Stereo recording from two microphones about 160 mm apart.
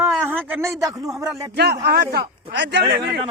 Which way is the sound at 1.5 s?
90° right.